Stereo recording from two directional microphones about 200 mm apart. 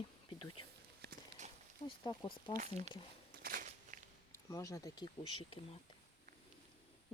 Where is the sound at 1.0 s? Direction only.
40° right (ahead or behind).